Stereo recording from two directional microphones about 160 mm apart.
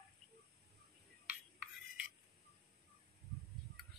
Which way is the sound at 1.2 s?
10° right (ahead or behind).